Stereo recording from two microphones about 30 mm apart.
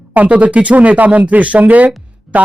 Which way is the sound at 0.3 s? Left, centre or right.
Right.